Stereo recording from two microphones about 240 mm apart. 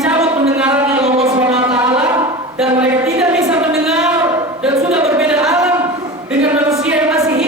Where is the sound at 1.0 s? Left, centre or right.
Right.